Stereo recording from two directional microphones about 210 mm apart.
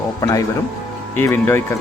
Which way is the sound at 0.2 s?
15° left (ahead or behind).